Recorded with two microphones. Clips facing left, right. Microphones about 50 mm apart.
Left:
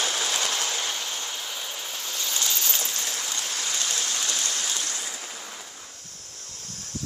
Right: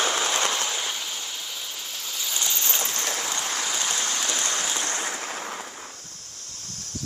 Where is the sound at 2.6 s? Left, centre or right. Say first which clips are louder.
Right 2 dB; centre.